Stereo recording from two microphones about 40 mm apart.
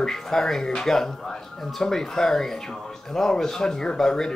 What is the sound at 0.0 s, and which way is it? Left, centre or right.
Speech, centre.